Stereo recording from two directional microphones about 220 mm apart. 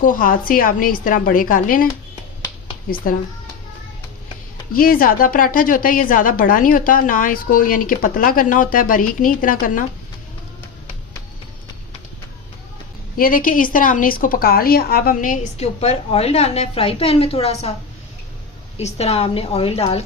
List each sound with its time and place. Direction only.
0.0 s a woman's voice: 40° left (ahead or behind)
2.4 s a sound: 25° left (ahead or behind)
4.7 s a woman's voice: 40° left (ahead or behind)
13.1 s a woman's voice: 40° left (ahead or behind)
18.8 s a woman's voice: 30° left (ahead or behind)